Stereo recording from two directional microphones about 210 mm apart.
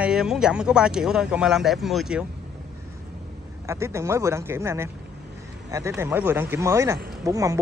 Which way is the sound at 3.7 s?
15° right (ahead or behind).